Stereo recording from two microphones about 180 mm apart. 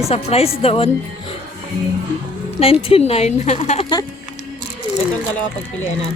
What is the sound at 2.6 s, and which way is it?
A woman's voice, 30° left (ahead or behind).